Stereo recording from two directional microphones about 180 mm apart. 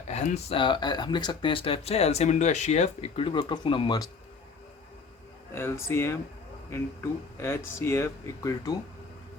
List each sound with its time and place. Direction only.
0.1 s speech: 40° left (ahead or behind)
5.5 s speech: 15° left (ahead or behind)